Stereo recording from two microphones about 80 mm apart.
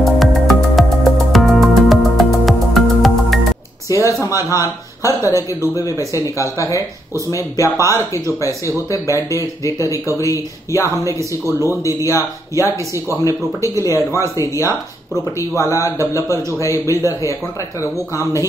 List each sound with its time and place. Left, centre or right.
0.0 s music: centre
3.9 s a sound: left
4.4 s speech: left
7.7 s speech: right
8.6 s speech: left